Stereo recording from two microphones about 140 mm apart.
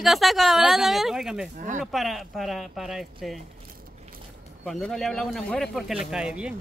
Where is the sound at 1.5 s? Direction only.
60° right (ahead or behind).